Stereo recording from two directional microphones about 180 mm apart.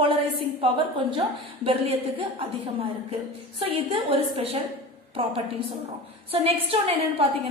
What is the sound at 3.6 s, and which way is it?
Speech, 30° right (ahead or behind).